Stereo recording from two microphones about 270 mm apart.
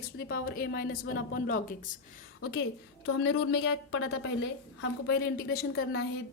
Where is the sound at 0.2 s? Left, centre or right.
Left.